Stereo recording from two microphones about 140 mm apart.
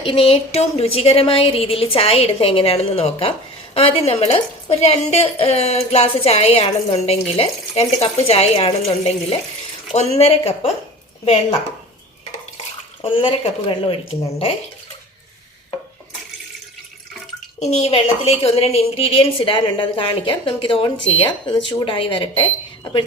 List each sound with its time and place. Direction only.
0.0 s a woman's voice: 40° left (ahead or behind)
13.0 s a woman's voice: 40° left (ahead or behind)
17.6 s a woman's voice: 50° left (ahead or behind); by 23.0 s 35° left (ahead or behind)